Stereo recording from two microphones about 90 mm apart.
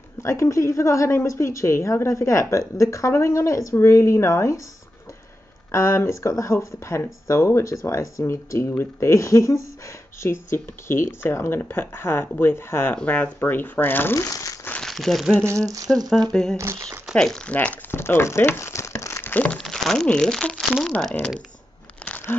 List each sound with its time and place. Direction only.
0.2 s speech: 35° left (ahead or behind)
5.7 s speech: 30° left (ahead or behind)
14.1 s speech: 40° left (ahead or behind)
14.7 s crumpling: 5° left (ahead or behind)
15.4 s speech: 35° right (ahead or behind)
16.3 s speech: 5° left (ahead or behind)
16.5 s speech: 30° right (ahead or behind)
17.1 s speech: 10° left (ahead or behind)
17.6 s a sound: 20° left (ahead or behind)
19.3 s speech: 15° left (ahead or behind)
19.6 s speech: 5° left (ahead or behind)